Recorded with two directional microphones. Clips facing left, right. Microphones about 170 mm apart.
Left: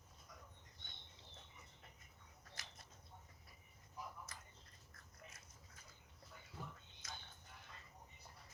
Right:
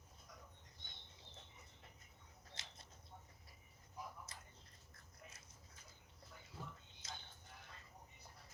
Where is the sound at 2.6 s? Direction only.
25° right (ahead or behind).